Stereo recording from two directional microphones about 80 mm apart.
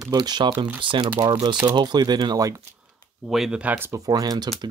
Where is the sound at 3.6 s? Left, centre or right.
Right.